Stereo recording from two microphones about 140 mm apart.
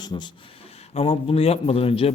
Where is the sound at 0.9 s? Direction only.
40° left (ahead or behind).